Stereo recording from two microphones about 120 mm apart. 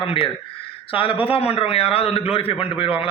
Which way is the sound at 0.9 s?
50° left (ahead or behind).